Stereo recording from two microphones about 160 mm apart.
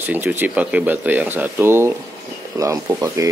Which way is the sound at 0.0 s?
10° right (ahead or behind).